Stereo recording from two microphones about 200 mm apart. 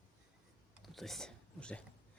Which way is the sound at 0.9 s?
Centre (ahead or behind).